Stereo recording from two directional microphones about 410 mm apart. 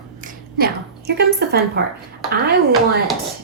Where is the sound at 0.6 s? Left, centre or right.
Right.